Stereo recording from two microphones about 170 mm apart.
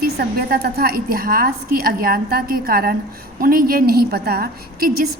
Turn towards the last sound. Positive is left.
turn(degrees=-65)  # may be behind; listen again after turning